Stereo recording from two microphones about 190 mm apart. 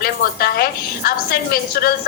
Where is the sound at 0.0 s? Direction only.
50° left (ahead or behind).